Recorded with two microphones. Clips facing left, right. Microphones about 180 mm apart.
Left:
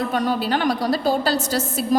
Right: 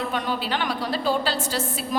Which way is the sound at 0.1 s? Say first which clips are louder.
Left 5 dB; 40° left (ahead or behind).